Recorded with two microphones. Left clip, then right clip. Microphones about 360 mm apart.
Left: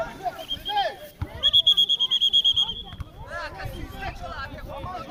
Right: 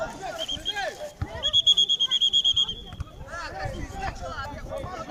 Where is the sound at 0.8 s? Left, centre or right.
Centre.